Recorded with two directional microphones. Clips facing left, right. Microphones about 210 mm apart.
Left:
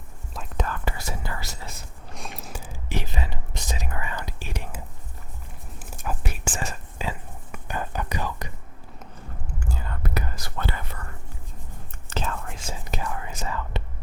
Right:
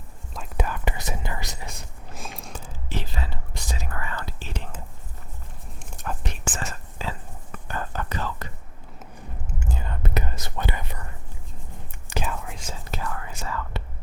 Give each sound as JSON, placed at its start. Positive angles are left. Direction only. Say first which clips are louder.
{"t": 0.5, "sound": "whispering", "louder": "right 1 dB", "side_deg": -15}
{"t": 1.7, "sound": "a sound", "louder": "right 1 dB", "side_deg": 0}
{"t": 2.9, "sound": "whispering", "louder": "left 2 dB", "side_deg": 15}
{"t": 5.8, "sound": "whispering", "louder": "left 1 dB", "side_deg": 5}
{"t": 9.6, "sound": "whispering", "louder": "right 1 dB", "side_deg": -20}
{"t": 12.0, "sound": "whispering", "louder": "even", "side_deg": -15}
{"t": 12.6, "sound": "whispering", "louder": "left 2 dB", "side_deg": 15}